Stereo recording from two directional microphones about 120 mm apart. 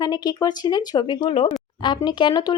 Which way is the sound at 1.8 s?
40° left (ahead or behind).